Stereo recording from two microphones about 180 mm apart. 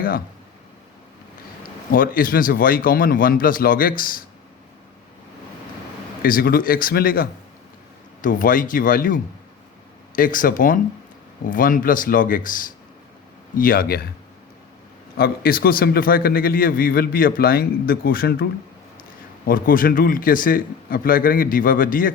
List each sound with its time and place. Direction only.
1.9 s a man's voice: 50° left (ahead or behind)
6.2 s a man's voice: 55° left (ahead or behind)
15.2 s a man's voice: 55° left (ahead or behind)
19.5 s a man's voice: 50° left (ahead or behind)